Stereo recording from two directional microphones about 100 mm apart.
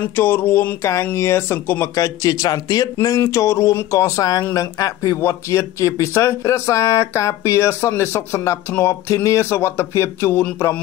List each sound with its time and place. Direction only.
0.0 s speech: 20° left (ahead or behind)